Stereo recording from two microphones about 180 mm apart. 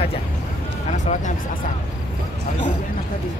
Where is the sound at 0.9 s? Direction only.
45° left (ahead or behind).